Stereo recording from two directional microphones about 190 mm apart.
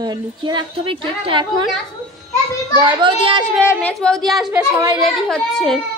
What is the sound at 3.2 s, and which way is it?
Speech, 25° right (ahead or behind).